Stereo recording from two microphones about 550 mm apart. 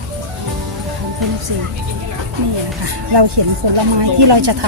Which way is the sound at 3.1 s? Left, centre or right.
Right.